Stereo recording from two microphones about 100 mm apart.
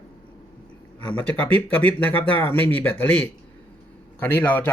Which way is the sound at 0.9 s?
15° left (ahead or behind).